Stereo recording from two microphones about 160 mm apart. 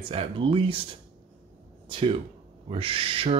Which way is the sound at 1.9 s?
35° right (ahead or behind).